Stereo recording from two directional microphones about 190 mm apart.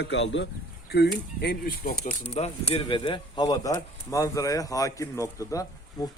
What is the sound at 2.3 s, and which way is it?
Speech, 35° left (ahead or behind).